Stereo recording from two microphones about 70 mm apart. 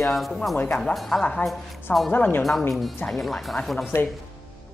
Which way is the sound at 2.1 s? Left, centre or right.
Left.